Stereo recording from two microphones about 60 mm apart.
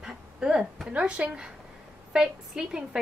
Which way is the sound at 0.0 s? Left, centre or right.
Centre.